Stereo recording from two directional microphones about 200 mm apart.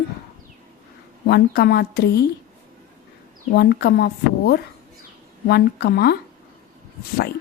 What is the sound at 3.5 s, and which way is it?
Speech, 55° left (ahead or behind).